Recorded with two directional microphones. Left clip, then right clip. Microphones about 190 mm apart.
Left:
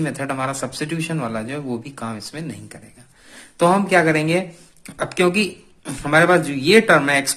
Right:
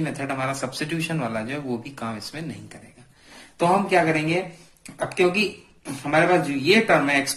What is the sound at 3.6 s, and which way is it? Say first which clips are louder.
Speech: left 4 dB; 50° left (ahead or behind).